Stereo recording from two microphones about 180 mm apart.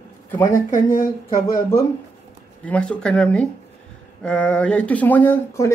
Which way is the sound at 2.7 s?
5° left (ahead or behind).